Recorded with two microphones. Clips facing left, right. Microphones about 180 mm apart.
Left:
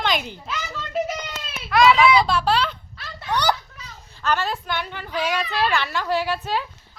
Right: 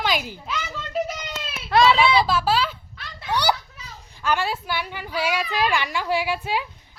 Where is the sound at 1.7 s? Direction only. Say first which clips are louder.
Left 1 dB; 30° right (ahead or behind).